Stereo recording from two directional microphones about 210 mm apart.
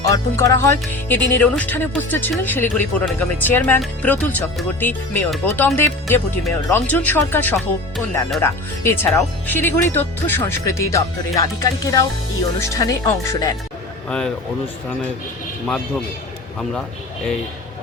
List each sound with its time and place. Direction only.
0.1 s speech: 15° left (ahead or behind)
15.6 s speech: 5° left (ahead or behind)